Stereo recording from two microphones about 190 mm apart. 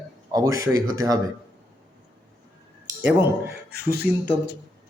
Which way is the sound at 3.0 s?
10° right (ahead or behind).